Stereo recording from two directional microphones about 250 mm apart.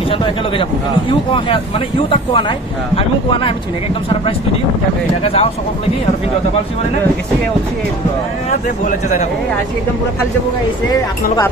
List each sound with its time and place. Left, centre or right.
0.1 s speech: centre
5.2 s speech: left
8.5 s speech: left